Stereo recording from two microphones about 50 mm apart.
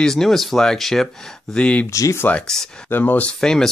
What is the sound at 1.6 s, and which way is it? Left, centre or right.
Speech, left.